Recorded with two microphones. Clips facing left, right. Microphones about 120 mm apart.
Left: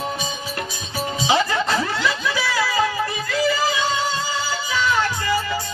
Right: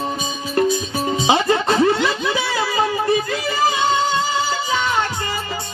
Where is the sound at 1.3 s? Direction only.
25° right (ahead or behind).